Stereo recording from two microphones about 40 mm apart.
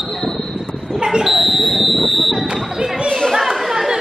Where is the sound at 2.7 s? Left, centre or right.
Centre.